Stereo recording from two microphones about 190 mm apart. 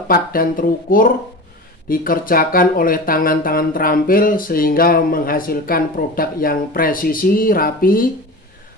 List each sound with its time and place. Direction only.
0.1 s speech: 50° left (ahead or behind)